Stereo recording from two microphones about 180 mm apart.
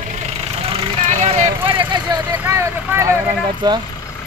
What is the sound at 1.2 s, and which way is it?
Vehicle, 40° right (ahead or behind).